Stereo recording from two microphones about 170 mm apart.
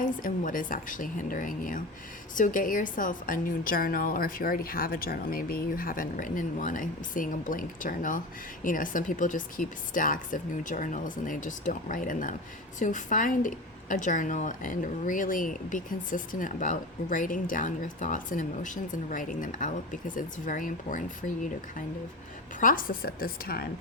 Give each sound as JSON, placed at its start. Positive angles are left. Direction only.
{"t": 0.0, "sound": "a woman's voice", "side_deg": 50}
{"t": 22.6, "sound": "a woman's voice", "side_deg": 55}